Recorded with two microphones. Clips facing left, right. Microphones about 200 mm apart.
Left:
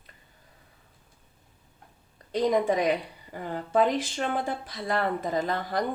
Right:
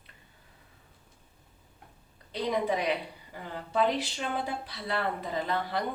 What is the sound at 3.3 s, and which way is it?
Speech, 50° left (ahead or behind).